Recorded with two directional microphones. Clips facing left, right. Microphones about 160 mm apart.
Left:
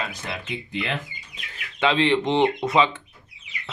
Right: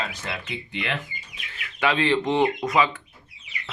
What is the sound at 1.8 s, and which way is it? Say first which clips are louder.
Speech: left 2 dB; 20° left (ahead or behind).